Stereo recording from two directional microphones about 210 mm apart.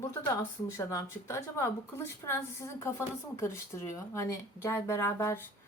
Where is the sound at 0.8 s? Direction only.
15° left (ahead or behind).